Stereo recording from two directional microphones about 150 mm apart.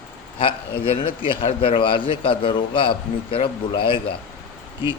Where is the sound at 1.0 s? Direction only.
35° left (ahead or behind).